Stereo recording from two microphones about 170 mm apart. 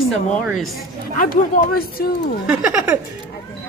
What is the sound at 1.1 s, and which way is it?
Speech, 50° left (ahead or behind).